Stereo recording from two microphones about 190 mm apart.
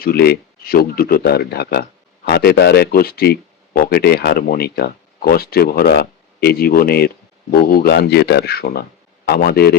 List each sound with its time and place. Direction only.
0.0 s speech: 55° left (ahead or behind)